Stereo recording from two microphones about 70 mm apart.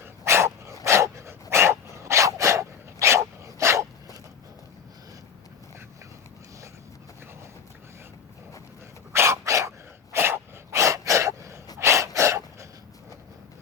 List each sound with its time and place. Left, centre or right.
0.0 s dog: right
9.1 s a sound: right
11.8 s gasp: right